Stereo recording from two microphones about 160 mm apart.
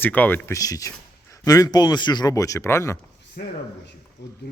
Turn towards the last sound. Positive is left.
turn(degrees=90)